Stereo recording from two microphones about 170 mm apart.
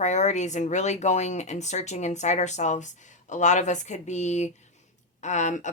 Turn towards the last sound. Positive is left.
turn(degrees=45)  # may be behind; listen again after turning